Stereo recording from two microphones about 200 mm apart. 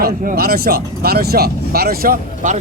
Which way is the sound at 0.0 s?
45° right (ahead or behind).